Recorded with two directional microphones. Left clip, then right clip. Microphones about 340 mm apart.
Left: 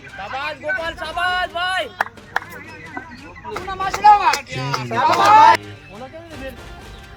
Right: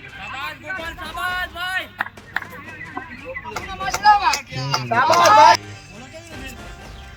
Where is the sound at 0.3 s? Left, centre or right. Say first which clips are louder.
Left 6 dB; left.